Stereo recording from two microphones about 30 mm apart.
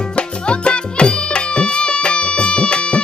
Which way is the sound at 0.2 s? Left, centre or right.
Left.